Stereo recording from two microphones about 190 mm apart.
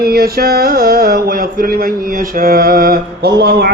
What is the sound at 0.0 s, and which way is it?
Speech, 50° right (ahead or behind).